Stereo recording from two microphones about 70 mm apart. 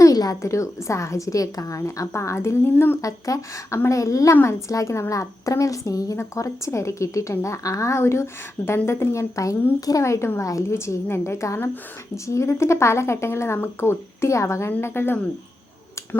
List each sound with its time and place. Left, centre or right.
0.0 s a woman's voice: left
3.0 s a woman's voice: left